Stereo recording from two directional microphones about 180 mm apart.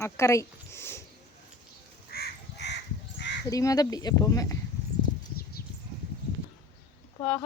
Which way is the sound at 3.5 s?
20° left (ahead or behind).